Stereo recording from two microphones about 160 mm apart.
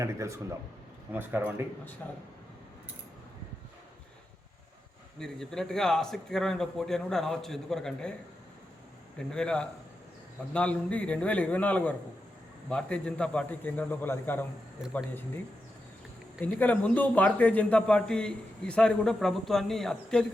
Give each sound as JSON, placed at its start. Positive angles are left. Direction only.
{"t": 0.0, "sound": "speech", "side_deg": -20}
{"t": 5.2, "sound": "a man's voice", "side_deg": 5}
{"t": 9.1, "sound": "a man's voice", "side_deg": 5}
{"t": 16.4, "sound": "a man's voice", "side_deg": 10}